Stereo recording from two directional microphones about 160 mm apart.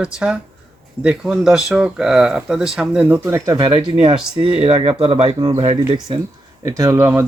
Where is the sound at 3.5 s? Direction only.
30° right (ahead or behind).